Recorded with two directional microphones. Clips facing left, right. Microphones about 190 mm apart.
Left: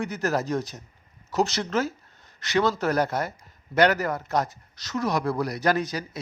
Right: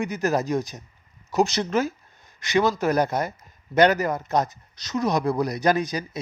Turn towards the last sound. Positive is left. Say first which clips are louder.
# right 2 dB
turn(degrees=-15)  # may be behind; listen again after turning